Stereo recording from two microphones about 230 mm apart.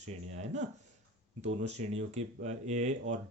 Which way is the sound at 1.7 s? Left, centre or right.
Right.